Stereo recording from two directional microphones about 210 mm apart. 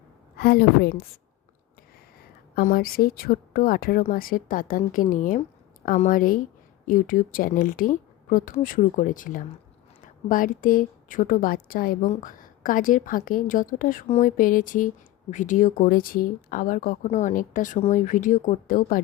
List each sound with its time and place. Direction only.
0.3 s speech: 45° left (ahead or behind)
2.6 s a woman's voice: 45° left (ahead or behind)